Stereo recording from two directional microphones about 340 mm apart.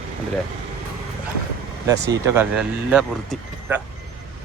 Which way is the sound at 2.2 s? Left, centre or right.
Centre.